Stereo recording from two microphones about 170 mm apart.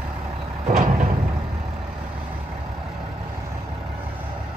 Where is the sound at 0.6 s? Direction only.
45° right (ahead or behind).